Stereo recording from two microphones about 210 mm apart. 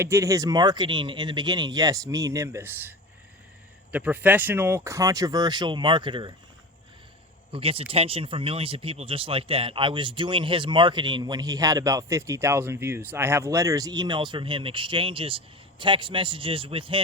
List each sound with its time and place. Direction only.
0.0 s speech: 15° right (ahead or behind)
3.9 s speech: 5° right (ahead or behind)
7.5 s speech: 25° right (ahead or behind)